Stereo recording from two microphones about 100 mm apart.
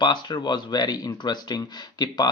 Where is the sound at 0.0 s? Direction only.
50° left (ahead or behind).